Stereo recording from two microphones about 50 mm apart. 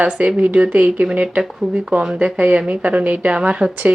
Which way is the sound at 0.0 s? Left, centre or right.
Right.